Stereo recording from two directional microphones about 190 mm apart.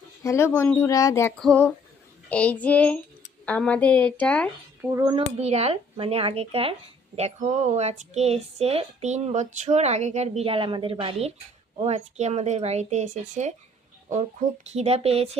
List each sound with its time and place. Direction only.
0.2 s speech: 15° left (ahead or behind)
4.9 s a child's voice: 15° right (ahead or behind)
5.4 s speech: 35° right (ahead or behind)